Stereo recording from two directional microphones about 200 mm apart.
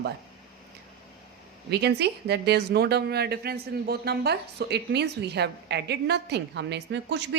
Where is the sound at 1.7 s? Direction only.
55° right (ahead or behind).